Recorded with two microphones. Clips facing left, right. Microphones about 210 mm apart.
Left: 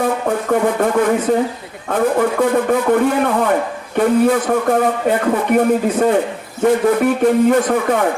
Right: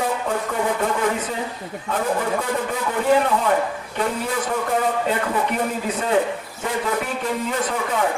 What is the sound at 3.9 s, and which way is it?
A man's voice, 55° left (ahead or behind).